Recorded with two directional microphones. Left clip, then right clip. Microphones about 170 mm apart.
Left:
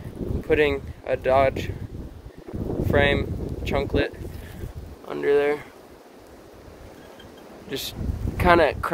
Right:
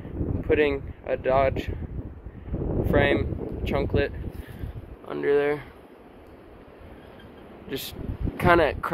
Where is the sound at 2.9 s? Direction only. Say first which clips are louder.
Left 2 dB; 15° left (ahead or behind).